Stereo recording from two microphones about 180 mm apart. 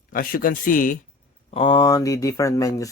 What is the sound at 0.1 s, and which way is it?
Speech, 55° left (ahead or behind).